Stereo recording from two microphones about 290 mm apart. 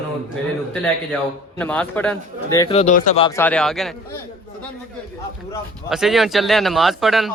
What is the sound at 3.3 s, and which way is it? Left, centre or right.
A man's voice, centre.